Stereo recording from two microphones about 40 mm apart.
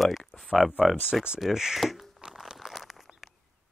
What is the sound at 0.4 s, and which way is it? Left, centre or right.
Speech, centre.